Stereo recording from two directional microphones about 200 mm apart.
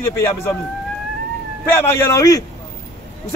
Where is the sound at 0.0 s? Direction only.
15° left (ahead or behind).